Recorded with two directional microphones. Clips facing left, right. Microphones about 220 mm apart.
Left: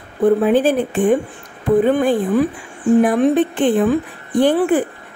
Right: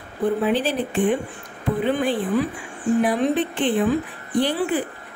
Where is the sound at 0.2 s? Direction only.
50° left (ahead or behind).